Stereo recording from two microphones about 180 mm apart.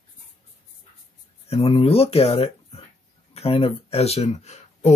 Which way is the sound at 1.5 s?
30° left (ahead or behind).